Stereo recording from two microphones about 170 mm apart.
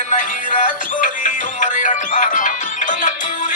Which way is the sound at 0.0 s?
50° left (ahead or behind).